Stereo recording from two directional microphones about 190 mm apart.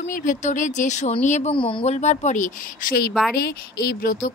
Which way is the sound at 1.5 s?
25° left (ahead or behind).